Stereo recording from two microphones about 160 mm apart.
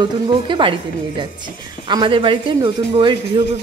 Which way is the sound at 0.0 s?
30° right (ahead or behind).